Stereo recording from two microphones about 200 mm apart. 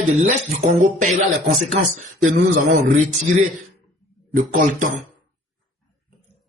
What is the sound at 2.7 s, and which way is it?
Speech, 40° right (ahead or behind).